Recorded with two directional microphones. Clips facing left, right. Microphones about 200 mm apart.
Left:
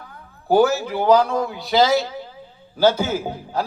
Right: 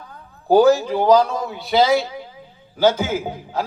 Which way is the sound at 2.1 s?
10° right (ahead or behind).